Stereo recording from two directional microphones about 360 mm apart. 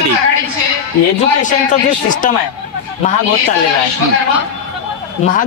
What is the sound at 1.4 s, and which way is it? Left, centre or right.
Speech, left.